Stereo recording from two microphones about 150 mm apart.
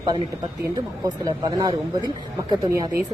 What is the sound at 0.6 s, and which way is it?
Speech, 25° right (ahead or behind).